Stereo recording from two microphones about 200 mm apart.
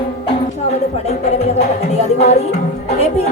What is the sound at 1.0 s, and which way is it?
Speech, 35° left (ahead or behind).